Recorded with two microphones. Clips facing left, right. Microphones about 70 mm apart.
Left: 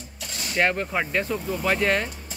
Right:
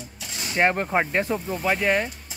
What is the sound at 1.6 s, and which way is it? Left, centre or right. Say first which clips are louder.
Speech: even; centre.